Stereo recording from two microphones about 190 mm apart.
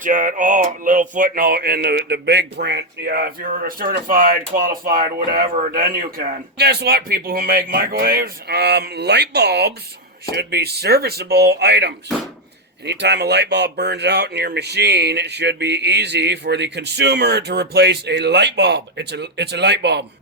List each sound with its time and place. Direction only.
0.0 s music: 45° right (ahead or behind); by 20.1 s 65° right (ahead or behind)